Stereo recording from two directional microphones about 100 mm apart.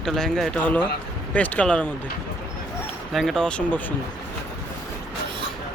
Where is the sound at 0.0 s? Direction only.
5° left (ahead or behind).